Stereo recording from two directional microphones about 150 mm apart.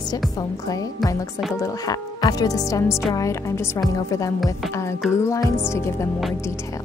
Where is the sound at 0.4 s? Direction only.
25° left (ahead or behind).